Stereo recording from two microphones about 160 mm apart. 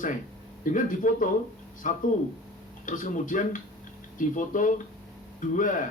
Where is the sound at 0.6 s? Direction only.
55° left (ahead or behind).